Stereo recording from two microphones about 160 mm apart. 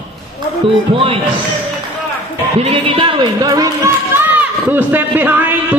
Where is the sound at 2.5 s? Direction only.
40° right (ahead or behind); by 3.7 s 25° right (ahead or behind).